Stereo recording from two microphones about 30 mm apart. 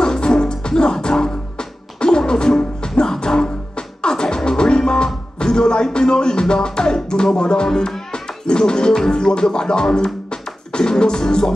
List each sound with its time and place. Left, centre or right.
0.0 s music: left
7.3 s speech: left